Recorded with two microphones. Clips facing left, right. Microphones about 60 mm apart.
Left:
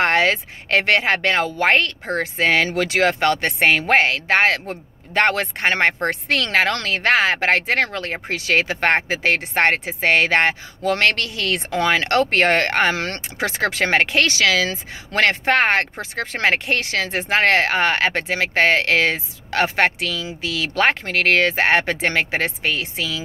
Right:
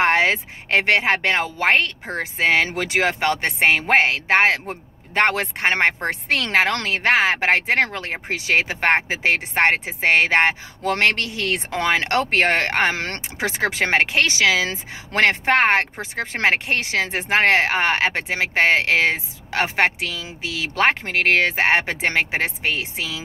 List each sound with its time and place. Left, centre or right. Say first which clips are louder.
0.0 s speech: even; centre
6.7 s speech: even; right
7.0 s speech: left 1 dB; centre
10.8 s speech: left 1 dB; right; by 12.7 s centre
12.9 s speech: left 2 dB; right
13.4 s speech: left 1 dB; centre